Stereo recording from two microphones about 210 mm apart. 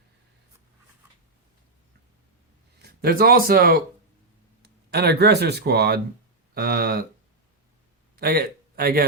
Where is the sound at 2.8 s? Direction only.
45° right (ahead or behind).